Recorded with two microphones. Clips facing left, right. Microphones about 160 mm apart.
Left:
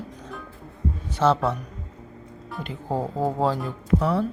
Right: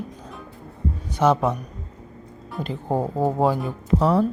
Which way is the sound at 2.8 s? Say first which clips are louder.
Right 3 dB; 15° right (ahead or behind).